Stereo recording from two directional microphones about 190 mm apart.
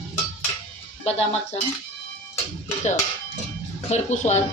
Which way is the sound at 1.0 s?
35° left (ahead or behind).